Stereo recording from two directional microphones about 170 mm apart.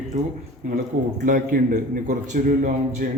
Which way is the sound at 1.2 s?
55° right (ahead or behind).